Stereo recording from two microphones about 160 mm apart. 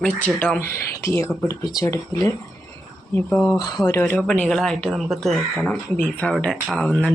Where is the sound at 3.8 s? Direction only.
10° left (ahead or behind).